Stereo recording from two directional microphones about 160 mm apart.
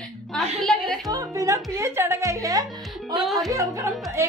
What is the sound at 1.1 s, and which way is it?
Speech, 20° right (ahead or behind).